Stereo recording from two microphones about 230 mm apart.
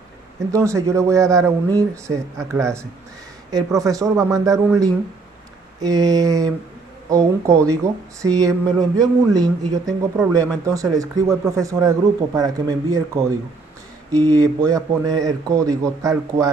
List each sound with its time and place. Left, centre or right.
0.5 s speech: centre